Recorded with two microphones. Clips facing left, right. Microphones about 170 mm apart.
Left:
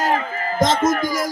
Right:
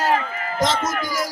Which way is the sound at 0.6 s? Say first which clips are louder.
Left 5 dB; 50° left (ahead or behind).